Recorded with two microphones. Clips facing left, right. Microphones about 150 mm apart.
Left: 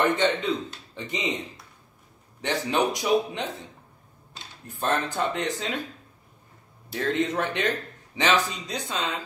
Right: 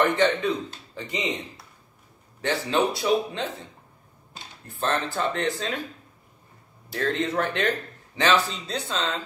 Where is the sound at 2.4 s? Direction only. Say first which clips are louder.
Right 1 dB; 15° left (ahead or behind).